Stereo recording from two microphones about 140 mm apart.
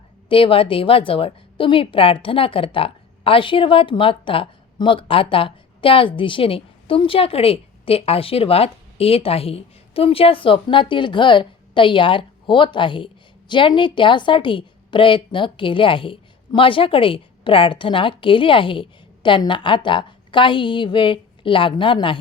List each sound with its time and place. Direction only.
0.3 s a woman's voice: 40° left (ahead or behind)